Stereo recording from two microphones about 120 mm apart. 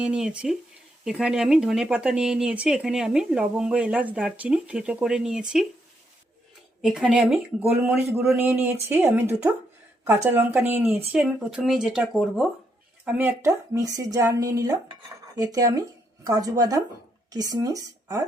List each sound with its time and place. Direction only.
0.0 s speech: 5° right (ahead or behind)
6.8 s speech: 5° right (ahead or behind)
7.6 s speech: 20° right (ahead or behind); by 12.5 s 5° right (ahead or behind)
13.1 s speech: 15° right (ahead or behind)
13.4 s a woman's voice: 30° right (ahead or behind)